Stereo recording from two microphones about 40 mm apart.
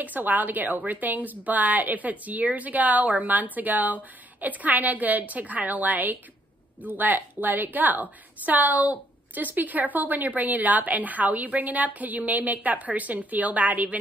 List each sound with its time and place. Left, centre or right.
0.0 s a woman's voice: right